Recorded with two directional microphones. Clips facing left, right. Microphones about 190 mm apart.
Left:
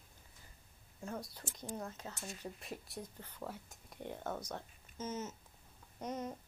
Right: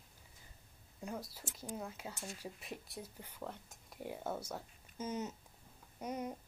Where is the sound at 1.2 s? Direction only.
5° right (ahead or behind).